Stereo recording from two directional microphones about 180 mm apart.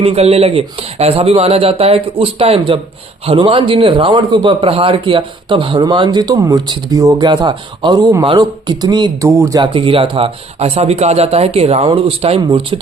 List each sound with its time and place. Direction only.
0.0 s a man's voice: 35° right (ahead or behind); by 9.6 s 15° right (ahead or behind)
9.7 s speech: 30° right (ahead or behind)